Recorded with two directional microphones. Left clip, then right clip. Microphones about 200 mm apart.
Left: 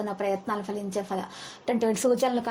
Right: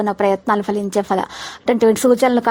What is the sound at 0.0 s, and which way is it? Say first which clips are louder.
A woman's voice: right 12 dB; 45° right (ahead or behind).